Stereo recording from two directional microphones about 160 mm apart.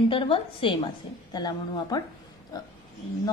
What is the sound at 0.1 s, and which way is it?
A woman's voice, 35° left (ahead or behind).